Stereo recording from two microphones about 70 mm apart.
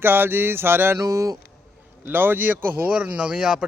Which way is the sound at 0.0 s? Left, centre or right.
Right.